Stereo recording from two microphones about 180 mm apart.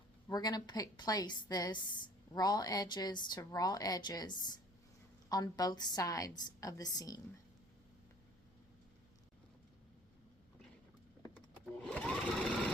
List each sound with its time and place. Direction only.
0.3 s a woman's voice: 20° left (ahead or behind)
11.3 s sewing machine: 5° left (ahead or behind)